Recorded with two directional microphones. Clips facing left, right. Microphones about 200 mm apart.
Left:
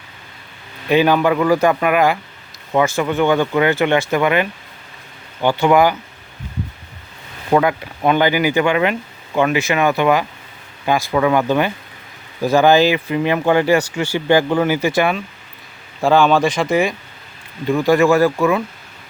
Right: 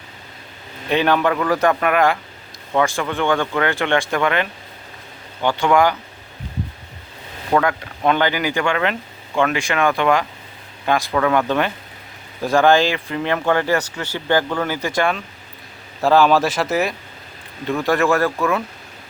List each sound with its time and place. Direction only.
0.9 s a man's voice: 5° left (ahead or behind)
7.5 s a man's voice: 15° left (ahead or behind)